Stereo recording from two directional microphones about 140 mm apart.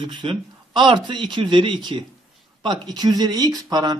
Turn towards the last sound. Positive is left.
turn(degrees=-30)  # may be behind; listen again after turning